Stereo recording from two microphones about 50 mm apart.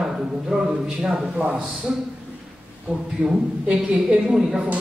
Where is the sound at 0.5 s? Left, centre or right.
Centre.